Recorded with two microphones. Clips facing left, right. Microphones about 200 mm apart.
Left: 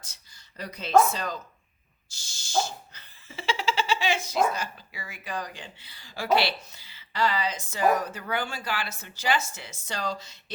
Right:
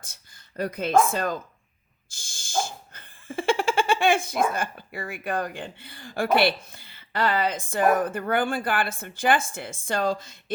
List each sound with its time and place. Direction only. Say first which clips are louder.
0.0 s speech: right 3 dB; 50° right (ahead or behind)
2.0 s laughter: right 2 dB; 50° right (ahead or behind)